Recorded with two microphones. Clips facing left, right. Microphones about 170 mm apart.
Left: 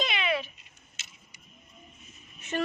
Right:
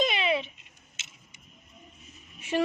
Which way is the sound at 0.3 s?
25° right (ahead or behind).